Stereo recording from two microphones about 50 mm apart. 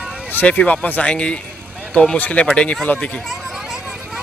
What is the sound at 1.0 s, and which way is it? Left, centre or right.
Speech, left.